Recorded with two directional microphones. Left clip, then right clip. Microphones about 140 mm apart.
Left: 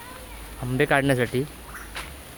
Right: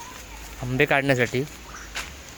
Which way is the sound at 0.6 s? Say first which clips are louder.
Right 1 dB; centre (ahead or behind).